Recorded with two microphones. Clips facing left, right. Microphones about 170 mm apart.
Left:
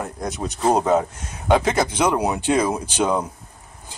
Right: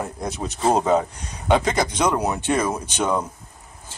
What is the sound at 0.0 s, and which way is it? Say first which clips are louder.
Speech: left 1 dB; centre (ahead or behind).